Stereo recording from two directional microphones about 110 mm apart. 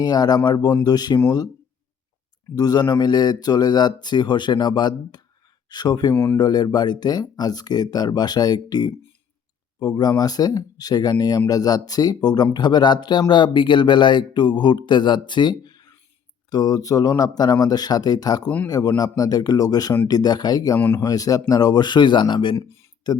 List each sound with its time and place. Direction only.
0.0 s speech: 40° left (ahead or behind)
2.6 s speech: 35° left (ahead or behind)
20.7 s speech: 20° left (ahead or behind)
21.0 s speech: 35° left (ahead or behind)
22.5 s speech: 25° left (ahead or behind)